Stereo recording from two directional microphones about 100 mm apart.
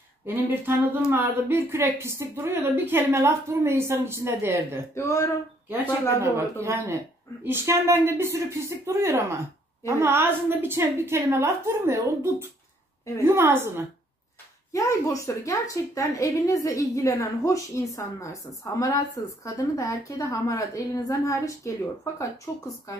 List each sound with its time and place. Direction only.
1.1 s a woman's voice: 20° right (ahead or behind)
4.9 s a woman's voice: 30° left (ahead or behind)
6.3 s a woman's voice: 25° right (ahead or behind)
14.7 s a woman's voice: 30° left (ahead or behind)